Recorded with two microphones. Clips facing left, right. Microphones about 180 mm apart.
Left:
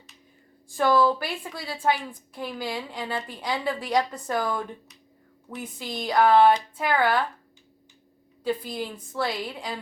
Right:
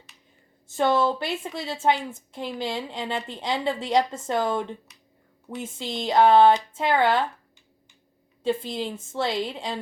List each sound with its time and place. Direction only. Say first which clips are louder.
0.7 s a woman's voice: left 1 dB; 25° right (ahead or behind)
8.4 s a woman's voice: right 2 dB; 25° right (ahead or behind)